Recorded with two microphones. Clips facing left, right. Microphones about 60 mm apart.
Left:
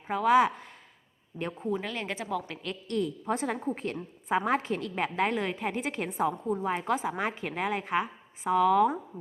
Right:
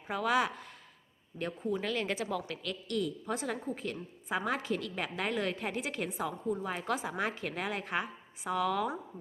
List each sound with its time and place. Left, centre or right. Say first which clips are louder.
0.1 s a woman's voice: left 7 dB; left
5.7 s a woman's voice: left 4 dB; left